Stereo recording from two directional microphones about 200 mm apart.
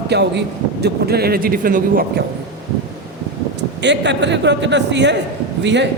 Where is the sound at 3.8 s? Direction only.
60° right (ahead or behind).